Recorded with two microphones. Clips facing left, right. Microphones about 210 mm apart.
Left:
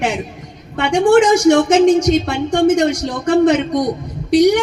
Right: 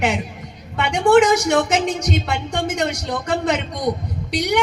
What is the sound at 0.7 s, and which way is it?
A man's voice, 50° left (ahead or behind).